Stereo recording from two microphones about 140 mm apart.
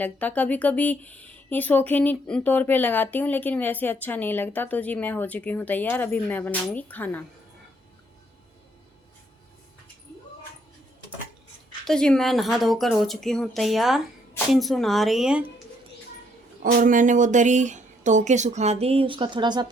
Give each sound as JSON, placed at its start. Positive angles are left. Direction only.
{"t": 0.0, "sound": "speech", "side_deg": 10}
{"t": 11.9, "sound": "speech", "side_deg": 5}
{"t": 16.6, "sound": "speech", "side_deg": -70}